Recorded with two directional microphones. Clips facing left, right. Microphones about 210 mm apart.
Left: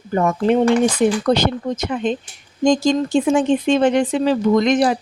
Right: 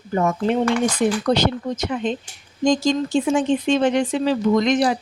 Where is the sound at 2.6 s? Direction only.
50° left (ahead or behind).